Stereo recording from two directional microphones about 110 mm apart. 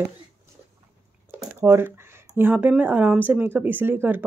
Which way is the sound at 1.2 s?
20° right (ahead or behind).